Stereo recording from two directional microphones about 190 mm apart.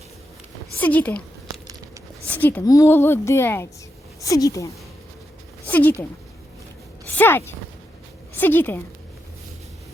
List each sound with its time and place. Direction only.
0.8 s a woman's voice: 10° left (ahead or behind)
2.2 s a woman's voice: 10° left (ahead or behind)
7.1 s a woman's voice: 10° left (ahead or behind)